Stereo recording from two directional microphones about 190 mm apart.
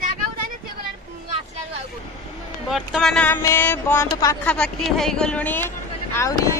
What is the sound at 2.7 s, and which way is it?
Speech, centre (ahead or behind).